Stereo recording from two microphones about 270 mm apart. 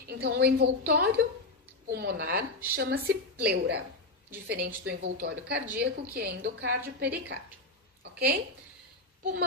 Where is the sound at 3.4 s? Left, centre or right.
Right.